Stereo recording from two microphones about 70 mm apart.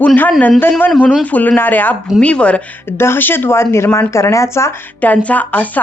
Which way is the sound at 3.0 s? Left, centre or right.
Left.